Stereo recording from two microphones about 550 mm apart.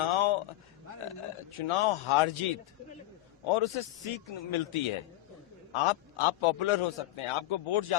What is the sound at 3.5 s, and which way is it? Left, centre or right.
A man's voice, left.